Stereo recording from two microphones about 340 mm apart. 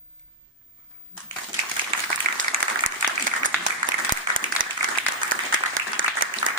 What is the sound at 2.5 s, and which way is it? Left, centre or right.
Applause, right.